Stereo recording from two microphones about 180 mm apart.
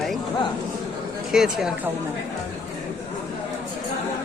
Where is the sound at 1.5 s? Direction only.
5° right (ahead or behind).